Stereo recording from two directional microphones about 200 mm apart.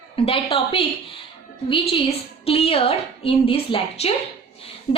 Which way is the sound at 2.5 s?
30° left (ahead or behind).